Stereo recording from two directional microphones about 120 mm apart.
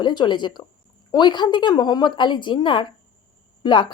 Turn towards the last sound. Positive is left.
turn(degrees=40)  # may be behind; listen again after turning